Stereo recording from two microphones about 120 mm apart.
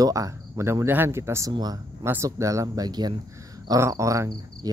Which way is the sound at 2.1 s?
25° right (ahead or behind).